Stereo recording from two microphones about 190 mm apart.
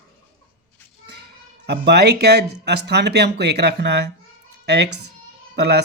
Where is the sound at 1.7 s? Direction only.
60° right (ahead or behind).